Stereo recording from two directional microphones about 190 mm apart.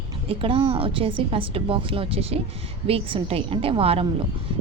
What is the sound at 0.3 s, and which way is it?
Speech, 30° right (ahead or behind).